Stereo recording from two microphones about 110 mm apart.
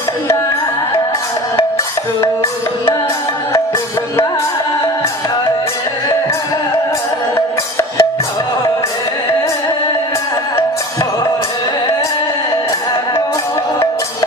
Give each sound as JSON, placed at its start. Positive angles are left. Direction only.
{"t": 2.2, "sound": "music", "side_deg": 20}
{"t": 7.3, "sound": "music", "side_deg": 25}